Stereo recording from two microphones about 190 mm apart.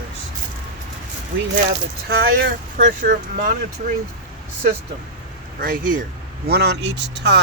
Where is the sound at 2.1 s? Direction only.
55° right (ahead or behind).